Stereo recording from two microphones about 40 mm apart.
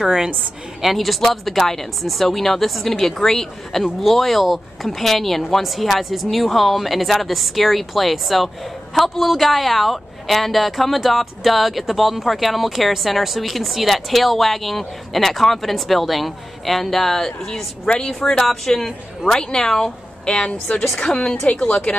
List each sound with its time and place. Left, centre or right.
0.0 s a woman's voice: centre
0.8 s speech: centre
18.4 s speech: centre
20.2 s a woman's voice: left